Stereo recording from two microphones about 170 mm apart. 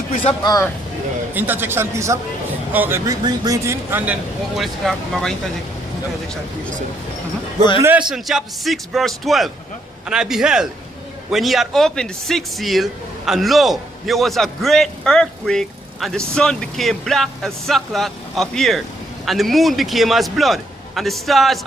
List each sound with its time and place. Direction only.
0.3 s speech: 20° left (ahead or behind)
1.3 s speech: 10° right (ahead or behind)
7.8 s speech: 15° right (ahead or behind)